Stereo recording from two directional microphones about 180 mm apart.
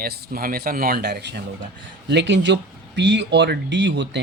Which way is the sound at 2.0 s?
75° right (ahead or behind).